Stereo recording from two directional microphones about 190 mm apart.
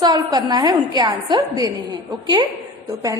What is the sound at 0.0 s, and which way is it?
A woman's voice, 20° right (ahead or behind).